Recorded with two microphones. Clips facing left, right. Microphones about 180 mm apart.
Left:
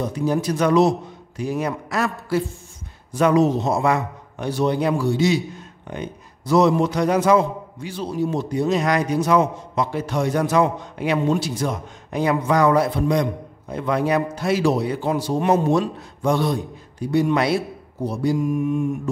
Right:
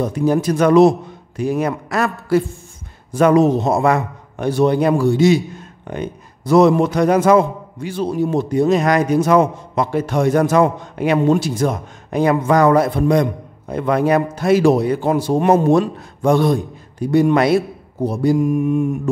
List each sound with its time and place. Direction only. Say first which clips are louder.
0.0 s a man's voice: right 5 dB; 55° right (ahead or behind)